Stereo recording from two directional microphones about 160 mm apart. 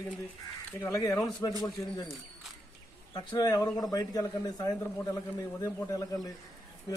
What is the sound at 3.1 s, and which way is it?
Speech, 25° left (ahead or behind).